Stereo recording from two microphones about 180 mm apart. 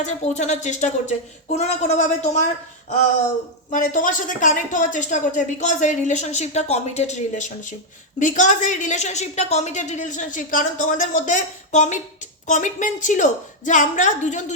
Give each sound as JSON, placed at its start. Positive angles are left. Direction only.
{"t": 0.0, "sound": "speech", "side_deg": 40}
{"t": 3.7, "sound": "speech", "side_deg": 45}